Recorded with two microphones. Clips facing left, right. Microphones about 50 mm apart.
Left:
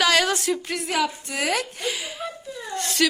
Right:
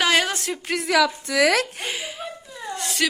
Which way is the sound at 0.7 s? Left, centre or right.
Right.